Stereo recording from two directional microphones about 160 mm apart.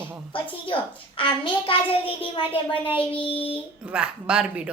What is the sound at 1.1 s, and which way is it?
Speech, 35° left (ahead or behind).